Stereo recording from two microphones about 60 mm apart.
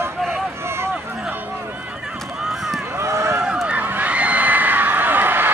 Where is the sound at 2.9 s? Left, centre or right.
Right.